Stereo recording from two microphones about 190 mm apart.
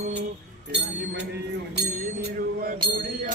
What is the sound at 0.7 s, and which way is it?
Speech, 65° right (ahead or behind).